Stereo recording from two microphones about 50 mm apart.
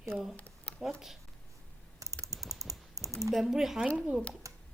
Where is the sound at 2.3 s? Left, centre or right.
Centre.